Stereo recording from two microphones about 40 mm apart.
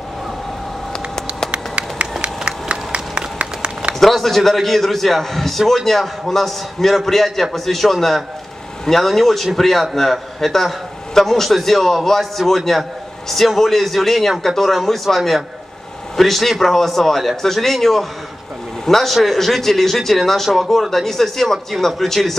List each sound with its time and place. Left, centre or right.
1.5 s run: right
4.0 s a man's voice: centre